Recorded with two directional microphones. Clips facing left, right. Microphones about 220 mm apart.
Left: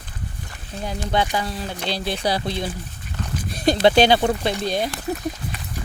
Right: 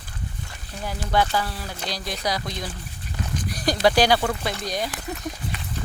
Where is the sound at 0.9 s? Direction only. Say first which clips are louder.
Left 1 dB; 20° left (ahead or behind).